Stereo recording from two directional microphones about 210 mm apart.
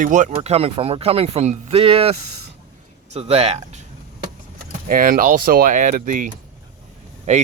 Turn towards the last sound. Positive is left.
turn(degrees=-35)  # may be behind; listen again after turning